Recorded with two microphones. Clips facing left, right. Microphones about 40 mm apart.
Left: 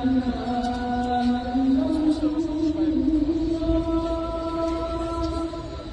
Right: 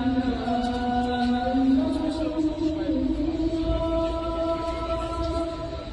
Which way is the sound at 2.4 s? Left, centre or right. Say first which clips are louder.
Left 1 dB; right.